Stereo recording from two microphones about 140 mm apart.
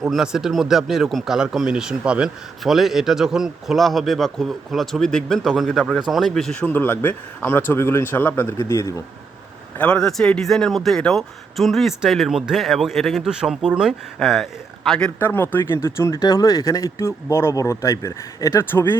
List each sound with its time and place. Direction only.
0.0 s speech: 5° right (ahead or behind); by 9.0 s 20° left (ahead or behind)
9.7 s speech: 10° left (ahead or behind)